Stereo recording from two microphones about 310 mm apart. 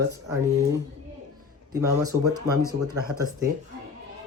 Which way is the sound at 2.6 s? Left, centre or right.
Right.